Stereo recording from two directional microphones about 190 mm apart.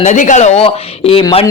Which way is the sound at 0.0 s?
40° left (ahead or behind).